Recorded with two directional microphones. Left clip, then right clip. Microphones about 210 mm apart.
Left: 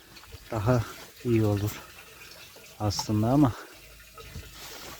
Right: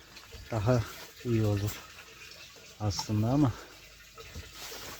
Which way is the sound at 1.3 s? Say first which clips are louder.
Left 5 dB; 45° left (ahead or behind).